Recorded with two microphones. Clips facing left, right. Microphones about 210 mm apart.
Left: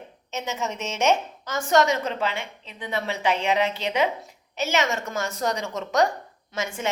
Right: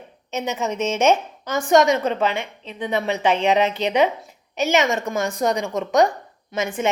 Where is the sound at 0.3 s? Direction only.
15° right (ahead or behind).